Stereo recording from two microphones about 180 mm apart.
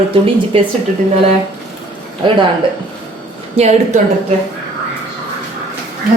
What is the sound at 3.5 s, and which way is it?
Speech, 40° right (ahead or behind).